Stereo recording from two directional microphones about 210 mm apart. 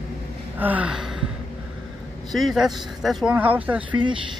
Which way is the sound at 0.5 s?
5° right (ahead or behind).